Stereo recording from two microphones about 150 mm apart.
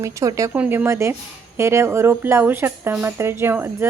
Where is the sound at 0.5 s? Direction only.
10° right (ahead or behind).